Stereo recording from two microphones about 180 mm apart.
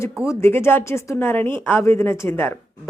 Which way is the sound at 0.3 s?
15° left (ahead or behind).